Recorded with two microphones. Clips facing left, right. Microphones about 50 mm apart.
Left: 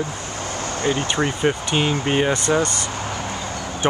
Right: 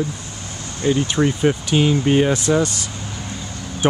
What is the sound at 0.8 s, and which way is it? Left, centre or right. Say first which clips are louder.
Speech: right 4 dB; left.